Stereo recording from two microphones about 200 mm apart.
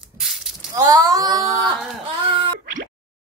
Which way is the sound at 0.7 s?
15° right (ahead or behind).